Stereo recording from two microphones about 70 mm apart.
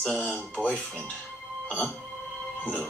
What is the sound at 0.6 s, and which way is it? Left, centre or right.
Speech, centre.